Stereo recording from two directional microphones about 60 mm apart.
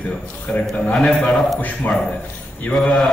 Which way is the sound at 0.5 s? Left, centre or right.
Left.